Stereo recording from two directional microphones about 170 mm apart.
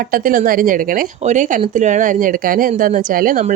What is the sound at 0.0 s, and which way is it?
A woman's voice, 55° right (ahead or behind).